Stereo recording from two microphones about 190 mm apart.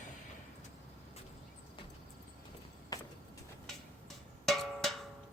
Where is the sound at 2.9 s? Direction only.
20° left (ahead or behind).